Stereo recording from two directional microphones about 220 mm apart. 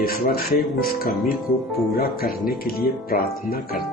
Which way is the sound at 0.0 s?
40° left (ahead or behind).